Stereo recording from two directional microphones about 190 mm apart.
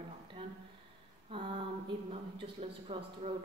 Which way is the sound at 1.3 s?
25° right (ahead or behind).